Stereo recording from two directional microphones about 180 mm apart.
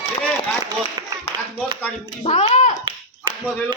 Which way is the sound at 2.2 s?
35° left (ahead or behind).